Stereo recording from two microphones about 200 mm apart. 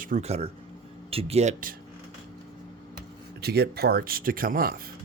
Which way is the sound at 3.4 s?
55° right (ahead or behind).